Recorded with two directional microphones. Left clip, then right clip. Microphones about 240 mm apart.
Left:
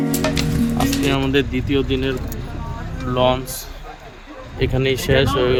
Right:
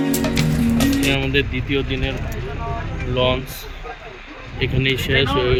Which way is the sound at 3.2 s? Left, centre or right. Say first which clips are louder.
Left 2 dB; centre.